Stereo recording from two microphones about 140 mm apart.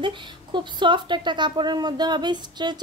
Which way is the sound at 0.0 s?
35° right (ahead or behind).